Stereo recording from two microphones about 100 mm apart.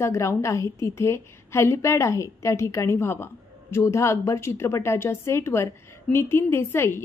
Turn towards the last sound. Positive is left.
turn(degrees=25)  # may be behind; listen again after turning